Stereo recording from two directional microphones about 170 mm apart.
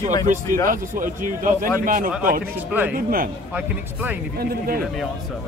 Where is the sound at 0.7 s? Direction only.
50° right (ahead or behind).